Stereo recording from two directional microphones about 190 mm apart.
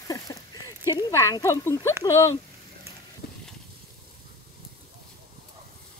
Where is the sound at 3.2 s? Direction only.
55° left (ahead or behind).